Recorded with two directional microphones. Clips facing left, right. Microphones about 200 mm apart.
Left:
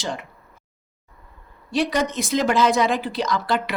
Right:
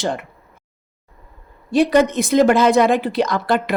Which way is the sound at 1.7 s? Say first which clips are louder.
Right 8 dB; 55° right (ahead or behind).